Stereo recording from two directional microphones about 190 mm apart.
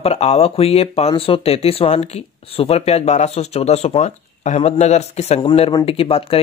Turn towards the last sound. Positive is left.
turn(degrees=30)  # may be behind; listen again after turning